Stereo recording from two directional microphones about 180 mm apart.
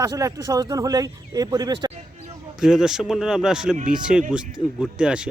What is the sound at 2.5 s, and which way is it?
Speech, 5° right (ahead or behind).